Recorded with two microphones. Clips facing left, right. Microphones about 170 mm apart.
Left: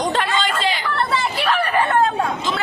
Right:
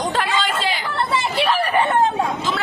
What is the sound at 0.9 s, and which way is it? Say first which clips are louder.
Chatter: even; 25° right (ahead or behind).